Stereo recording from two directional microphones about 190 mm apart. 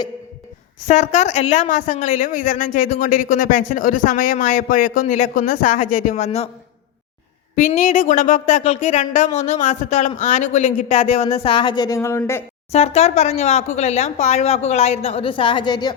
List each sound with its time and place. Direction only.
0.9 s a woman's voice: 40° left (ahead or behind)
7.7 s speech: 40° left (ahead or behind); by 12.5 s 15° left (ahead or behind)
12.7 s speech: 35° left (ahead or behind)